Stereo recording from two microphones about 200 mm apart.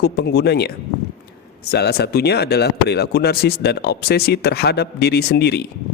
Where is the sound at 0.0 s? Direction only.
55° left (ahead or behind).